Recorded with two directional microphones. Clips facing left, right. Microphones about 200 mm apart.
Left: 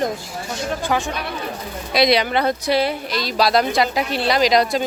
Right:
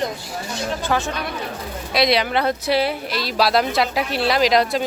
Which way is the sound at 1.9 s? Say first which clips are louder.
Left 2 dB; centre (ahead or behind).